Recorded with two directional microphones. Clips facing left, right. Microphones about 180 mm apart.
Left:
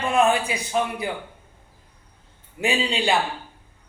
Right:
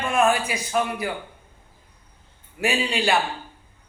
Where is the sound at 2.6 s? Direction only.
20° left (ahead or behind).